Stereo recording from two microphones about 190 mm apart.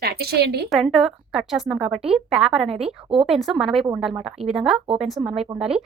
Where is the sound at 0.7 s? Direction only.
Centre (ahead or behind).